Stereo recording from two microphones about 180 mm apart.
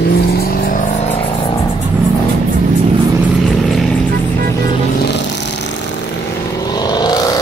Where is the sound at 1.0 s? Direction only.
30° left (ahead or behind).